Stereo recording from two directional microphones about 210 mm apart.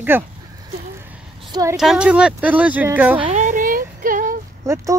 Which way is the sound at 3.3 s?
35° right (ahead or behind).